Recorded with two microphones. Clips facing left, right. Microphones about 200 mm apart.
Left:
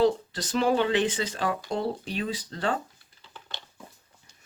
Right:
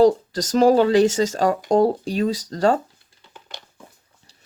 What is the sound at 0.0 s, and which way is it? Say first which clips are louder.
Speech: right 8 dB; 45° right (ahead or behind).